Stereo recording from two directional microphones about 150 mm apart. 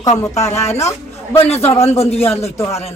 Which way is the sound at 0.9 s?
20° left (ahead or behind).